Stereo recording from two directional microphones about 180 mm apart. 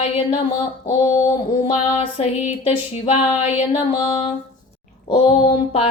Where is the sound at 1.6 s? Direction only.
35° left (ahead or behind).